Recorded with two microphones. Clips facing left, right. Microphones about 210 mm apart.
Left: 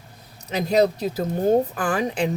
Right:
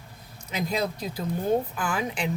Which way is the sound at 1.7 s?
45° left (ahead or behind).